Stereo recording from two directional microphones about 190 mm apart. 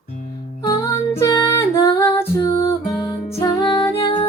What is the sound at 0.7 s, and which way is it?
Music, 15° left (ahead or behind).